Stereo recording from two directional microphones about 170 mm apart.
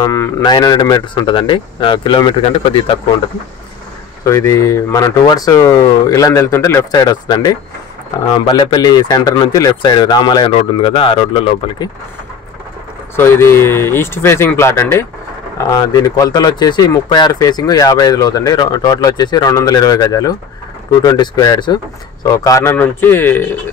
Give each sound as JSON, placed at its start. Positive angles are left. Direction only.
{"t": 0.0, "sound": "speech", "side_deg": 20}
{"t": 4.2, "sound": "speech", "side_deg": 15}
{"t": 13.1, "sound": "speech", "side_deg": 15}